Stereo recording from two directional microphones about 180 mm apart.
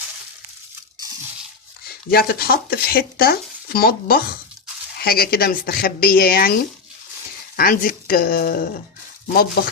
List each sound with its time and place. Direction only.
2.0 s speech: 55° left (ahead or behind)